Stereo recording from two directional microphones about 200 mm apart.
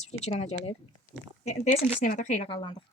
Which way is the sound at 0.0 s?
35° left (ahead or behind).